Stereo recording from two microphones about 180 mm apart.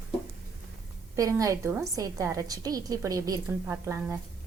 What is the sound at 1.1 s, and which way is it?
A woman's voice, 20° right (ahead or behind).